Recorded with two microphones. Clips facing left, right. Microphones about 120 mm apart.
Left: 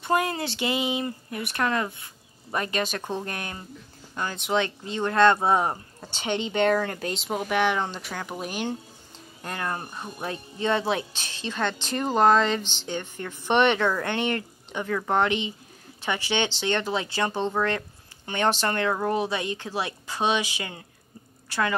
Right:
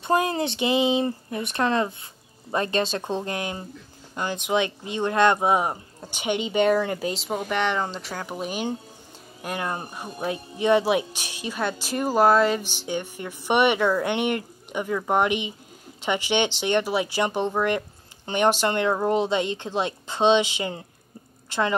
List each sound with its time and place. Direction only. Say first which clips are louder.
0.0 s speech: right 2 dB; 25° right (ahead or behind); by 8.6 s centre (ahead or behind)
9.4 s speech: right 2 dB; 15° right (ahead or behind)